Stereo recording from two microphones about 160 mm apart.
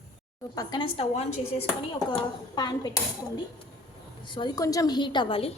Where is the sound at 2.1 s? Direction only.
25° left (ahead or behind).